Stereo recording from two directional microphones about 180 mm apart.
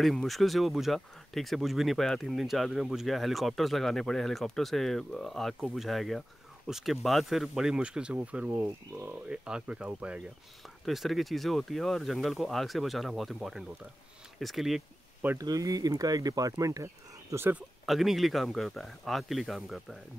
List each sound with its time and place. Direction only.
0.0 s speech: centre (ahead or behind)
15.2 s speech: 20° right (ahead or behind)
17.8 s speech: centre (ahead or behind)